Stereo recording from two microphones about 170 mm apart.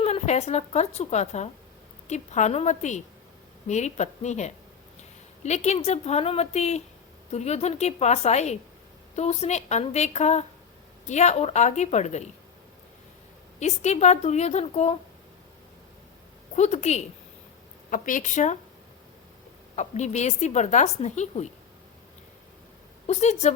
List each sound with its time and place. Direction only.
0.0 s a woman's voice: 40° left (ahead or behind)
13.6 s a woman's voice: 40° left (ahead or behind)
16.6 s a woman's voice: 40° left (ahead or behind)
17.9 s a woman's voice: 50° left (ahead or behind)
19.7 s a woman's voice: 45° left (ahead or behind)
23.0 s a woman's voice: 40° left (ahead or behind)